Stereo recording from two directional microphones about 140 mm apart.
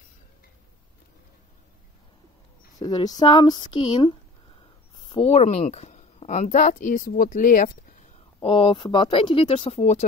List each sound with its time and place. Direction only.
2.8 s speech: 30° left (ahead or behind)
5.0 s a sound: 35° left (ahead or behind)
5.3 s a woman's voice: 50° left (ahead or behind); by 8.1 s 75° left (ahead or behind)
8.4 s speech: 40° left (ahead or behind)